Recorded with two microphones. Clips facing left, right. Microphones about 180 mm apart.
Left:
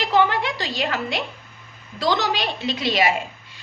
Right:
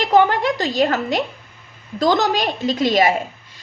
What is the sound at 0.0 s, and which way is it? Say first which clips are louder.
A woman's voice: right 5 dB; 45° right (ahead or behind).